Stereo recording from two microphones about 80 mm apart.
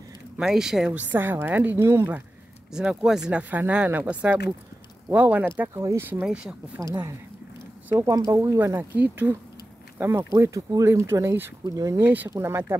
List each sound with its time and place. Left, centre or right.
0.4 s speech: centre
1.1 s speech: right
1.8 s speech: right
2.7 s speech: centre; by 6.2 s right
6.2 s speech: centre
8.0 s speech: right
8.6 s speech: right
11.6 s speech: right
12.0 s speech: right
12.3 s speech: right